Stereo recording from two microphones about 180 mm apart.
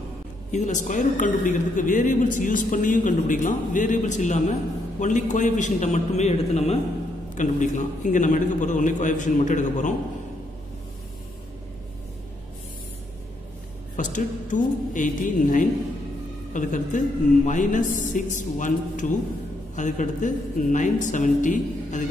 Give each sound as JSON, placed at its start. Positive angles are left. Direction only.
{"t": 0.5, "sound": "a woman's voice", "side_deg": 40}
{"t": 13.9, "sound": "a woman's voice", "side_deg": 45}